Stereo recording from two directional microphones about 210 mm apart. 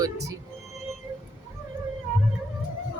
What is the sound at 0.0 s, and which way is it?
Speech, 15° right (ahead or behind).